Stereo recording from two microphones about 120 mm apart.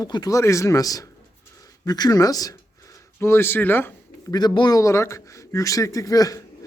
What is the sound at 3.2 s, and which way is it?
Speech, 20° left (ahead or behind).